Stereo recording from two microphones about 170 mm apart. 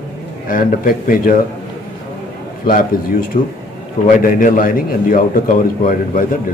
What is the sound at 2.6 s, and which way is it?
A man's voice, 55° left (ahead or behind).